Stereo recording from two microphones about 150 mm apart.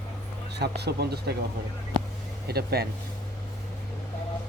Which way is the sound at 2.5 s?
90° right.